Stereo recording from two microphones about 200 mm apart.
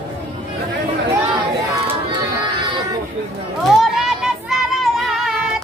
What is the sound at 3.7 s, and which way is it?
Child singing, centre (ahead or behind).